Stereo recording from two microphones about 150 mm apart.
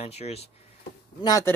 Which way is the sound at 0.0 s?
45° left (ahead or behind).